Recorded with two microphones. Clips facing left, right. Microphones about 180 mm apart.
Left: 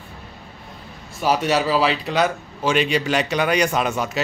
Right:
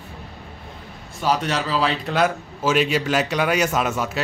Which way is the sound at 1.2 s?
10° left (ahead or behind).